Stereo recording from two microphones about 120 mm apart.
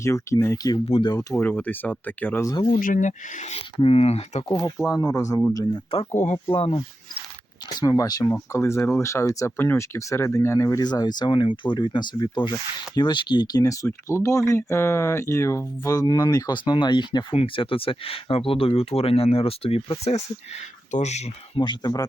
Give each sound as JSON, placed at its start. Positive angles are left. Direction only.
{"t": 0.0, "sound": "speech", "side_deg": 25}
{"t": 1.4, "sound": "speech", "side_deg": 15}
{"t": 2.7, "sound": "speech", "side_deg": 90}
{"t": 3.8, "sound": "speech", "side_deg": 55}
{"t": 4.4, "sound": "speech", "side_deg": 30}
{"t": 5.9, "sound": "speech", "side_deg": 45}
{"t": 7.8, "sound": "speech", "side_deg": 30}
{"t": 21.6, "sound": "speech", "side_deg": 35}